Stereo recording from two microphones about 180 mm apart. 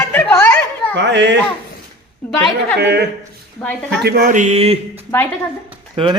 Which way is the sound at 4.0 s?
60° right (ahead or behind).